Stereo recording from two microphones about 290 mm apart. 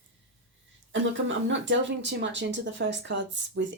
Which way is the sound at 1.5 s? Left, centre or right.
Right.